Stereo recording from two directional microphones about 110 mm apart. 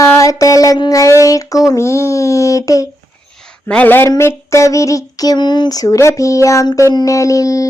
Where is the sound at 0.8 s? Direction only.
30° left (ahead or behind).